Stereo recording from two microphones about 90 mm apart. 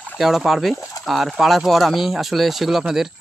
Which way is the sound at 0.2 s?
Centre (ahead or behind).